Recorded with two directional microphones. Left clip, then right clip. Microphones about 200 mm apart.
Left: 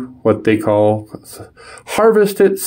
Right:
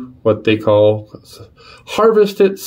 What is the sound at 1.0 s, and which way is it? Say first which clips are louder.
Speech: left 4 dB; 25° left (ahead or behind).